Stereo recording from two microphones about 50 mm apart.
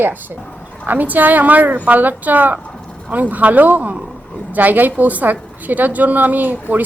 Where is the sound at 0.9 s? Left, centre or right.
Right.